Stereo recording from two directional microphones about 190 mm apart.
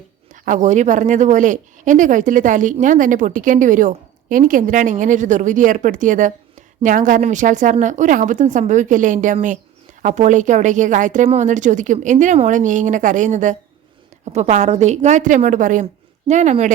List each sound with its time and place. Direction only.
0.4 s speech: 40° right (ahead or behind)